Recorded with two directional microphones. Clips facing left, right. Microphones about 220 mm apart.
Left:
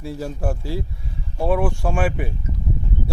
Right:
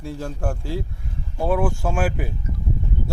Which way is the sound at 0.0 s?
5° left (ahead or behind).